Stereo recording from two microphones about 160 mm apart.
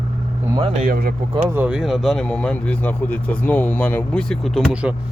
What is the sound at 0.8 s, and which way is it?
Speech, 70° right (ahead or behind).